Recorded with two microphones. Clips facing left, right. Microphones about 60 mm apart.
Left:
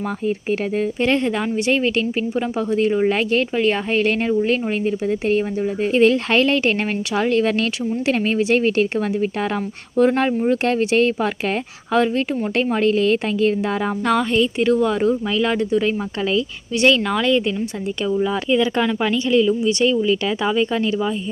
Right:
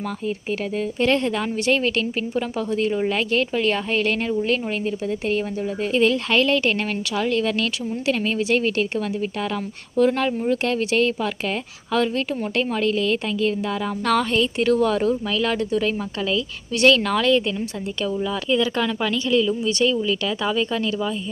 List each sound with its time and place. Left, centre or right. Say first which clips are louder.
1.0 s speech: even; centre
5.8 s speech: left 4 dB; left
14.0 s speech: left 1 dB; centre
18.2 s speech: left 3 dB; left